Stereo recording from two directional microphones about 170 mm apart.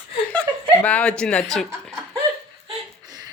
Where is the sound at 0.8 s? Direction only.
10° left (ahead or behind).